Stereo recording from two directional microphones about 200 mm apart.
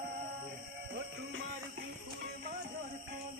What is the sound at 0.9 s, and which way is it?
Music, 60° right (ahead or behind).